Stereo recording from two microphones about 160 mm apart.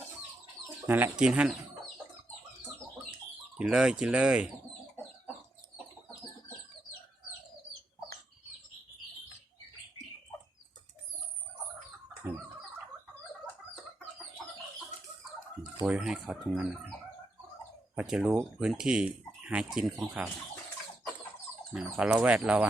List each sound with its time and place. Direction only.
0.9 s speech: 10° right (ahead or behind)
3.6 s speech: 5° right (ahead or behind)
15.8 s speech: 10° right (ahead or behind)
17.9 s speech: 5° right (ahead or behind)
21.7 s speech: 10° right (ahead or behind)